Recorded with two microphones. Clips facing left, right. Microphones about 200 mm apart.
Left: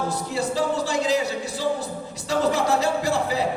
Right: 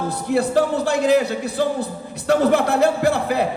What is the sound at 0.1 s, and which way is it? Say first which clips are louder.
Music: right 7 dB; 60° right (ahead or behind).